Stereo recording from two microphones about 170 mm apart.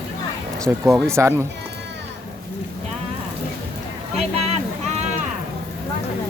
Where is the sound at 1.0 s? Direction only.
15° right (ahead or behind).